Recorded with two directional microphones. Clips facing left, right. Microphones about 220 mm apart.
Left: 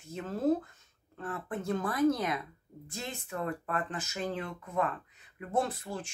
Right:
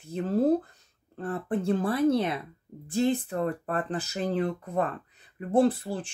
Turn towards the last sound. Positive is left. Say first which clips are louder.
# right 9 dB
turn(degrees=-35)  # may be behind; listen again after turning